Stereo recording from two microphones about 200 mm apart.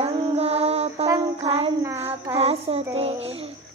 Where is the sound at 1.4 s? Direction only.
30° right (ahead or behind).